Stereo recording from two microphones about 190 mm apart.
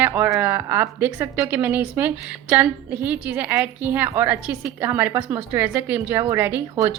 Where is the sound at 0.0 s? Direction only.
10° right (ahead or behind).